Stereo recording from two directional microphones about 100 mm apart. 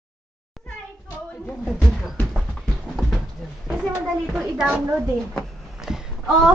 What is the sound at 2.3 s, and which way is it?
Clip-clop, centre (ahead or behind).